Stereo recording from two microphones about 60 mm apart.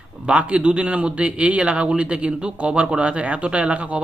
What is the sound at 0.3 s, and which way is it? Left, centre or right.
A man's voice, centre.